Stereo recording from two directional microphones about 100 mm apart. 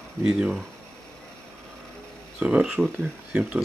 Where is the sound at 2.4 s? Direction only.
10° right (ahead or behind).